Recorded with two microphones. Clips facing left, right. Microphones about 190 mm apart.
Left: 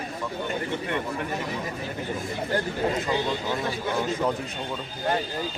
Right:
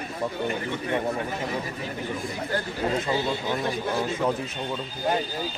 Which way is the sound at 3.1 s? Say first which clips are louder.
Even; 10° right (ahead or behind).